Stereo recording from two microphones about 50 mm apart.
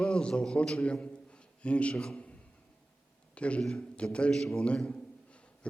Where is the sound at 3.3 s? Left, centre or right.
Left.